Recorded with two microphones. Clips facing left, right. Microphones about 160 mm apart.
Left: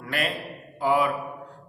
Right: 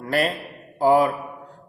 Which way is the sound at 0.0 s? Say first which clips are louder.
Right 6 dB; 40° right (ahead or behind).